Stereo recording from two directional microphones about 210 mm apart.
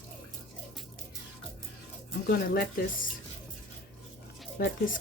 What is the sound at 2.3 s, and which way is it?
Speech, 50° left (ahead or behind).